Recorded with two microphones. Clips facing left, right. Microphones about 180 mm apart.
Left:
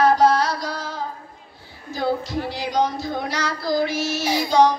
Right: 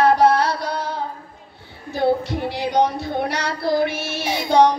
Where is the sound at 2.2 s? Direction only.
60° right (ahead or behind).